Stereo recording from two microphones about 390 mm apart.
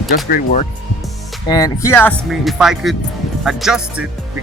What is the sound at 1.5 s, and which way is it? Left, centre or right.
Speech, centre.